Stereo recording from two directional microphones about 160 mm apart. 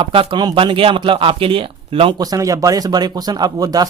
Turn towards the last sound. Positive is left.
turn(degrees=-25)  # may be behind; listen again after turning